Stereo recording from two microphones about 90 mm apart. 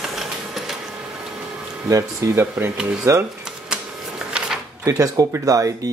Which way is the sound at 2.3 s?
25° right (ahead or behind).